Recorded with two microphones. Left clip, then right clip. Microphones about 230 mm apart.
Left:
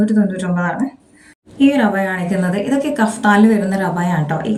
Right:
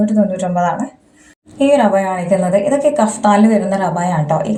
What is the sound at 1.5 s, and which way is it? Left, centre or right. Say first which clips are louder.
Speech: right 3 dB; centre.